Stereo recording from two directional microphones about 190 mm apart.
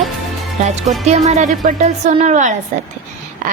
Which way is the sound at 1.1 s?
35° right (ahead or behind).